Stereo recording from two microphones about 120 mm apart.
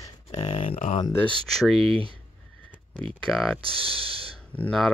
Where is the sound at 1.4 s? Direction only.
Centre (ahead or behind).